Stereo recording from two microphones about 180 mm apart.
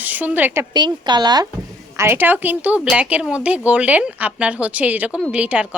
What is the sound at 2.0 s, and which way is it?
Speech, 10° right (ahead or behind).